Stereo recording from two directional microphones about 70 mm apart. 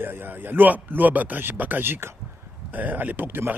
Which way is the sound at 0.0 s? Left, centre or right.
Right.